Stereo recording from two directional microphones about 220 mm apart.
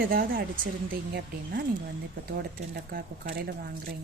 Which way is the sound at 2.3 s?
45° right (ahead or behind).